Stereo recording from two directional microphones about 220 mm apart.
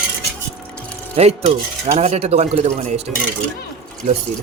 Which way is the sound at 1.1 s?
30° right (ahead or behind).